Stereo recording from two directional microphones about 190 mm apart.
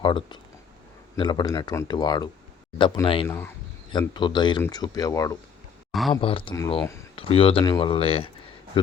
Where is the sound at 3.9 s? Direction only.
25° left (ahead or behind).